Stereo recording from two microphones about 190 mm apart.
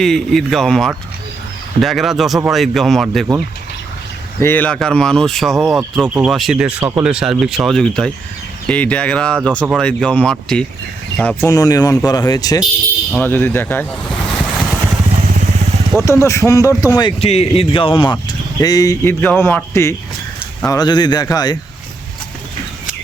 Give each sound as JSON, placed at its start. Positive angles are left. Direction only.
{"t": 0.0, "sound": "speech", "side_deg": 0}
{"t": 4.4, "sound": "a man's voice", "side_deg": 10}
{"t": 13.1, "sound": "a man's voice", "side_deg": 10}
{"t": 14.3, "sound": "vehicle", "side_deg": 0}
{"t": 16.0, "sound": "a man's voice", "side_deg": 15}